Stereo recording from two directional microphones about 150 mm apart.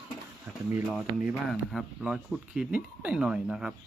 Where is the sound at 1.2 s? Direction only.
5° right (ahead or behind).